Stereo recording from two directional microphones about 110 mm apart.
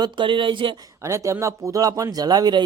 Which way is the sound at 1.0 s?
25° right (ahead or behind).